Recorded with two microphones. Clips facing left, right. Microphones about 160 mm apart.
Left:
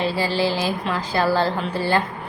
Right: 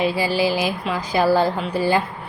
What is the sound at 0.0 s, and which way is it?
A woman's voice, 10° right (ahead or behind).